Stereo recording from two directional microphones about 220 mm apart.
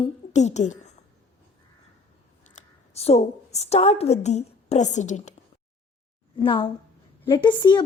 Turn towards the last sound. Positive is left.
turn(degrees=20)  # may be behind; listen again after turning